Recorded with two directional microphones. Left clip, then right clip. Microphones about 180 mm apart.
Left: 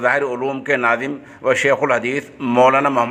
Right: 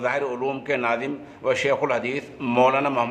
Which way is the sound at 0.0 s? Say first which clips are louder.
Left 7 dB; 30° left (ahead or behind).